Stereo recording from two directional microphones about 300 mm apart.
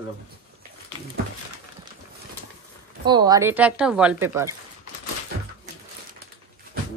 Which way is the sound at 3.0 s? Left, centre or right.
Centre.